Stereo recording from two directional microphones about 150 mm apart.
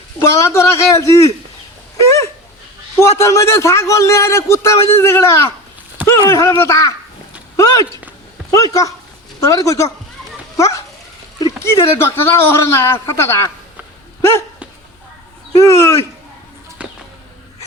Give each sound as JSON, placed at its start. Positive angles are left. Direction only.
{"t": 0.2, "sound": "a man's voice", "side_deg": 20}
{"t": 2.0, "sound": "a sound", "side_deg": 20}
{"t": 3.0, "sound": "a man's voice", "side_deg": 20}
{"t": 14.2, "sound": "dog", "side_deg": 15}
{"t": 15.5, "sound": "speech", "side_deg": 20}
{"t": 16.8, "sound": "a sound", "side_deg": -10}